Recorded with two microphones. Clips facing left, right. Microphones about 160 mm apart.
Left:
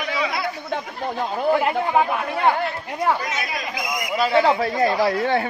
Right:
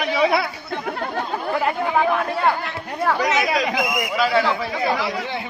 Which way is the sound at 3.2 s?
80° right.